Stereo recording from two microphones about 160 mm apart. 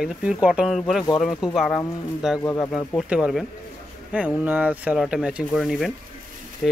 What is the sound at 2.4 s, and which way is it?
Speech, 20° left (ahead or behind).